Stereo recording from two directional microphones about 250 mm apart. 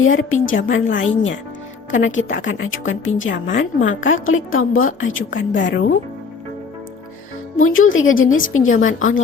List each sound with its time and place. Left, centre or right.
0.0 s a woman's voice: left
7.5 s a woman's voice: left